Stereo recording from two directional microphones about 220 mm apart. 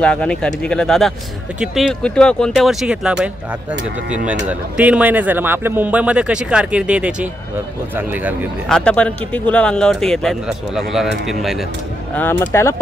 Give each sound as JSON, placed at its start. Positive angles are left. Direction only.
{"t": 0.0, "sound": "speech", "side_deg": 5}
{"t": 4.3, "sound": "a man's voice", "side_deg": -5}
{"t": 8.6, "sound": "speech", "side_deg": 5}
{"t": 12.2, "sound": "speech", "side_deg": 10}